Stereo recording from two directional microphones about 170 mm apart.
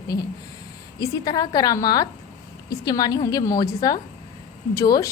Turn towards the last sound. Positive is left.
turn(degrees=20)  # may be behind; listen again after turning